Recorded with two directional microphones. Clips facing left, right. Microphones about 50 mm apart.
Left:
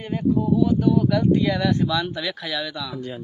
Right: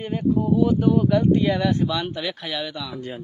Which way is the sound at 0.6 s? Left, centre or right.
Right.